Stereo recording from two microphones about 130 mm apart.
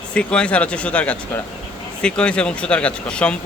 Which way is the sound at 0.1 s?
10° left (ahead or behind).